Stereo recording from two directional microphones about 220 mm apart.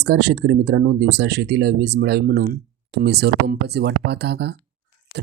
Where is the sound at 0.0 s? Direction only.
50° right (ahead or behind).